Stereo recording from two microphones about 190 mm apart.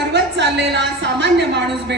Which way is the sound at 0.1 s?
65° right (ahead or behind).